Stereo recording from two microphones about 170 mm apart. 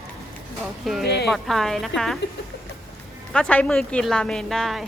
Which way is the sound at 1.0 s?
70° left (ahead or behind).